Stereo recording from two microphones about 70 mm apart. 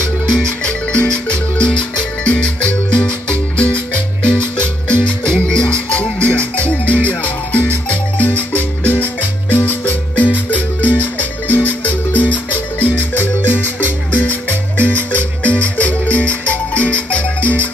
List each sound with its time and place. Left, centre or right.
0.7 s marimba: centre
5.3 s music: centre
7.9 s marimba: left
14.8 s music: left